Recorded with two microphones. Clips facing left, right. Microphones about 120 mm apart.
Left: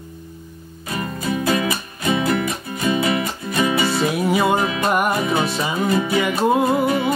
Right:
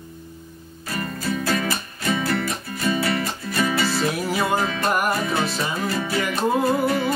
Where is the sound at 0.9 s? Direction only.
15° left (ahead or behind).